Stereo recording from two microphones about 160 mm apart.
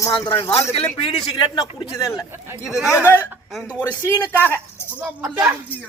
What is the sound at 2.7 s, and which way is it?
Speech, centre (ahead or behind).